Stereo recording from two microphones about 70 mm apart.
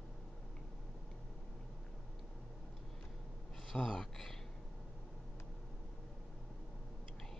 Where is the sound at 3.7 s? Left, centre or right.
Centre.